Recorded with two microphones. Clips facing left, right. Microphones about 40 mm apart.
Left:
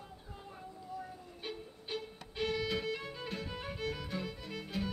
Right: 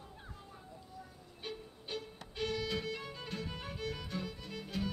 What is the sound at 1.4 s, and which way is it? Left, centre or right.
Violin, centre.